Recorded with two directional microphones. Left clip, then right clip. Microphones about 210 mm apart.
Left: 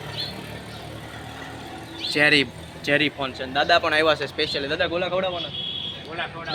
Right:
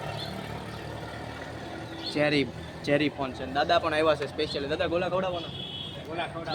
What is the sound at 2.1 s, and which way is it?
Speech, centre (ahead or behind).